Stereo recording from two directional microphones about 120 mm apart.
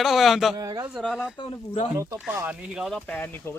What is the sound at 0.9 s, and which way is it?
Speech, centre (ahead or behind).